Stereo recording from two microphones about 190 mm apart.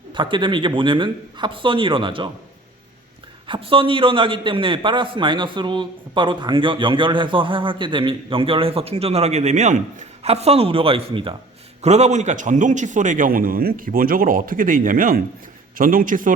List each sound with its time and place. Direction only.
0.1 s a man's voice: 25° right (ahead or behind)
3.4 s a man's voice: 25° right (ahead or behind); by 16.3 s 45° right (ahead or behind)